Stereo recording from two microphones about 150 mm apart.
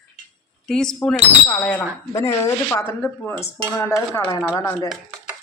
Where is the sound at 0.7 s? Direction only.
5° left (ahead or behind).